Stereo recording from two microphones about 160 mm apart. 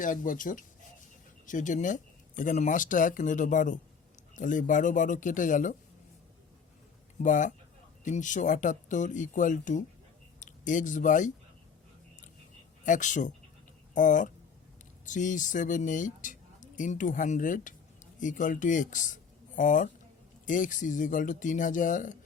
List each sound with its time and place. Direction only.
0.0 s speech: 55° left (ahead or behind)
7.2 s speech: 55° left (ahead or behind)
12.8 s speech: 50° left (ahead or behind)